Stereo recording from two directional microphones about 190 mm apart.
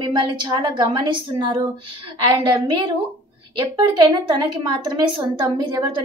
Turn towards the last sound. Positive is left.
turn(degrees=-25)  # may be behind; listen again after turning